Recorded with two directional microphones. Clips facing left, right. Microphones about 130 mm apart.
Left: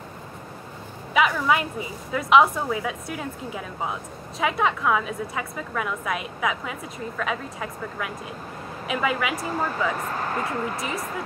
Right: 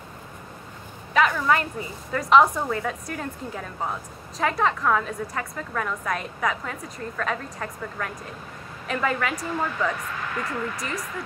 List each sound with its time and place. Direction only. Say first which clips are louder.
1.1 s a woman's voice: even; 5° left (ahead or behind)
9.5 s speech: left 1 dB; 40° left (ahead or behind)